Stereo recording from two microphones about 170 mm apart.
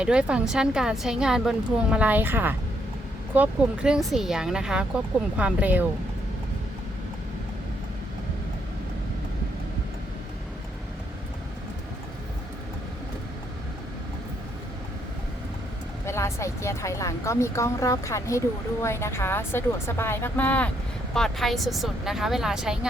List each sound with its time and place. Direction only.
0.0 s a woman's voice: 5° right (ahead or behind)
16.0 s a woman's voice: 15° left (ahead or behind); by 22.9 s 5° right (ahead or behind)